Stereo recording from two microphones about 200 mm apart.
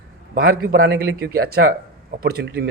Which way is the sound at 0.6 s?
60° right (ahead or behind).